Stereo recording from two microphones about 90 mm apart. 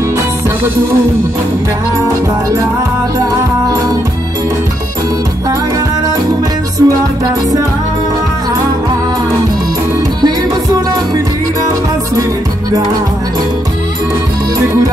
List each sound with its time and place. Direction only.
3.6 s music: 40° right (ahead or behind)
6.8 s music: 45° right (ahead or behind)